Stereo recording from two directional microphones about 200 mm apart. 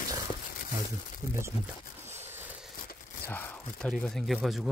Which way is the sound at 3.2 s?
5° left (ahead or behind).